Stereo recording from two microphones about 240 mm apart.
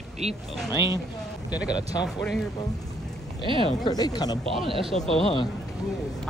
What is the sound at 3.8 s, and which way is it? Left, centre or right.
Speech, centre.